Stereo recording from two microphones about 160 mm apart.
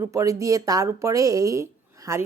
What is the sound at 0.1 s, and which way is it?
A woman's voice, 20° right (ahead or behind).